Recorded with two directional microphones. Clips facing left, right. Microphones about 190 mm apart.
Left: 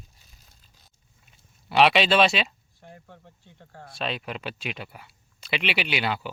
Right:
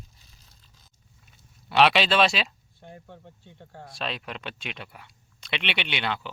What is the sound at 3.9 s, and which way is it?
Speech, centre (ahead or behind).